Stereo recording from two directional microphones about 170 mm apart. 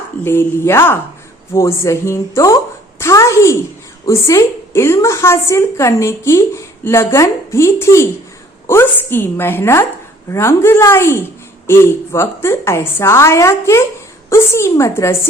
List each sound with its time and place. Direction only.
0.3 s a woman's voice: 15° left (ahead or behind)
3.0 s a sound: 15° left (ahead or behind)
4.0 s a woman's voice: 15° left (ahead or behind)